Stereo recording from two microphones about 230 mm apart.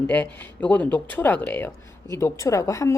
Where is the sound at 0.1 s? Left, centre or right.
Centre.